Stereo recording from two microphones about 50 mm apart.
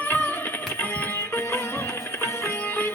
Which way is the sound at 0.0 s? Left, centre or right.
Left.